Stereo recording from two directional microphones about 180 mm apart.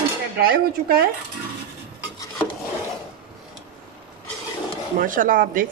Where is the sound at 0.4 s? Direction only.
55° right (ahead or behind).